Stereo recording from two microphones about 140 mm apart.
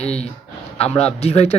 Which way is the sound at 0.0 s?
50° left (ahead or behind).